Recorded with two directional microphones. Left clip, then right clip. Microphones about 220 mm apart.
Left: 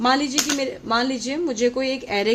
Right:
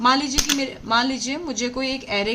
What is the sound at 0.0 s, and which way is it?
A woman's voice, 20° left (ahead or behind).